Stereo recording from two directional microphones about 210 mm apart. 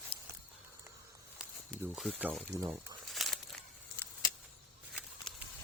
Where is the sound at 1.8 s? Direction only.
5° right (ahead or behind).